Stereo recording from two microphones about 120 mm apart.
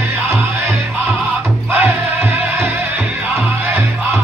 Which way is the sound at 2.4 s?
15° right (ahead or behind).